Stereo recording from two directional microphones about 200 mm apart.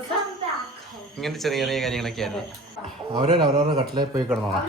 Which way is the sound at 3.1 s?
25° right (ahead or behind).